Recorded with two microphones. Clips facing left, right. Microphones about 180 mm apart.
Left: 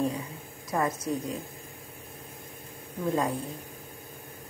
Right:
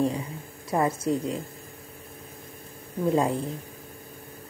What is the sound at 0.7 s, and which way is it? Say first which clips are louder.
Speech: right 4 dB; 30° right (ahead or behind).